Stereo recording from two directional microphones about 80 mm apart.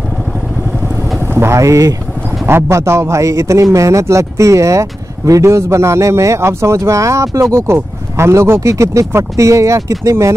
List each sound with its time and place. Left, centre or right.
1.2 s vehicle: right
2.4 s speech: right